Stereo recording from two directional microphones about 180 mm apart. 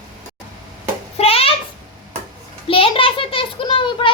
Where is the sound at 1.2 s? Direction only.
30° left (ahead or behind).